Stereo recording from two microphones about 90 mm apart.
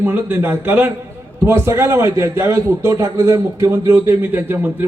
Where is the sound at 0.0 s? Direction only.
20° right (ahead or behind).